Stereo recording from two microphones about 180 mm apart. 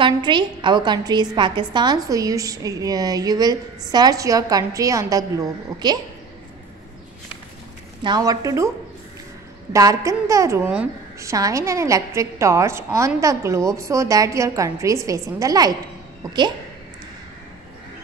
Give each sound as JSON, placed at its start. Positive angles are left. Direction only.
{"t": 0.0, "sound": "a woman's voice", "side_deg": -25}
{"t": 8.0, "sound": "a woman's voice", "side_deg": -20}